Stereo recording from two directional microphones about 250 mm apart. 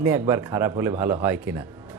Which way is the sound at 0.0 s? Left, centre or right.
Centre.